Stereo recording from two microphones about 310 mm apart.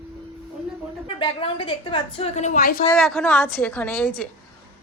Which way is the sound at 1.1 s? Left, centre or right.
Centre.